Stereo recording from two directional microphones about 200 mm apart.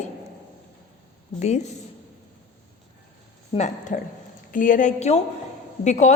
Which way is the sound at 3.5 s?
35° left (ahead or behind).